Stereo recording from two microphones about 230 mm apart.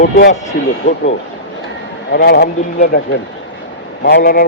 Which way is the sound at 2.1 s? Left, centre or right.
Left.